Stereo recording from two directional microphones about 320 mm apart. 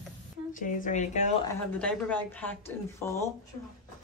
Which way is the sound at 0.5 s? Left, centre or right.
Left.